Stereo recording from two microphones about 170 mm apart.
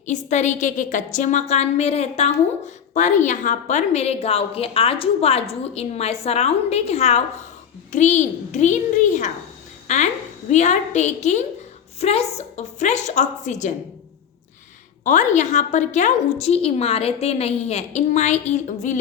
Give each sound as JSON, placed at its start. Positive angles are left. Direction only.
{"t": 0.0, "sound": "a woman's voice", "side_deg": 45}
{"t": 9.8, "sound": "a sound", "side_deg": 45}
{"t": 10.5, "sound": "a woman's voice", "side_deg": 45}
{"t": 15.0, "sound": "a woman's voice", "side_deg": 45}